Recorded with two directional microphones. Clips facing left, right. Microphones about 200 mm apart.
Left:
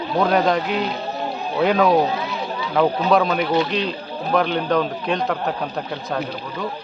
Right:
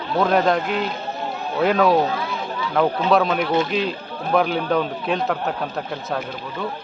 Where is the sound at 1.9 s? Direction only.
20° left (ahead or behind).